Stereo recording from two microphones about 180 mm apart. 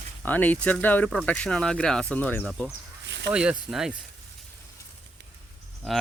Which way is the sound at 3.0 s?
75° right (ahead or behind).